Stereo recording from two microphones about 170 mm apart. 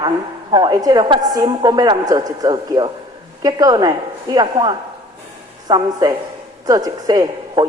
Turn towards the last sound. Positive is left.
turn(degrees=-25)  # may be behind; listen again after turning